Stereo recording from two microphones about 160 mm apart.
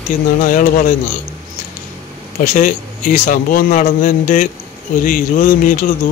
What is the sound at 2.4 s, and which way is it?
A man's voice, 55° left (ahead or behind).